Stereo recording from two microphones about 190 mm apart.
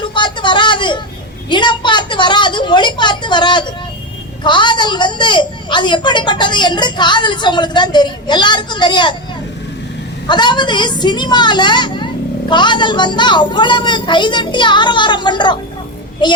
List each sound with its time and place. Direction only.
0.0 s a sound: 25° left (ahead or behind)
1.5 s a woman's voice: 25° left (ahead or behind)
10.2 s a woman's voice: 25° left (ahead or behind)